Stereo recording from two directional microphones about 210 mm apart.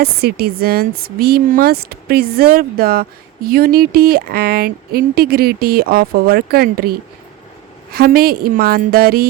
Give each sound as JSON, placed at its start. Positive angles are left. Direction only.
{"t": 0.0, "sound": "speech", "side_deg": -50}
{"t": 7.9, "sound": "speech", "side_deg": -45}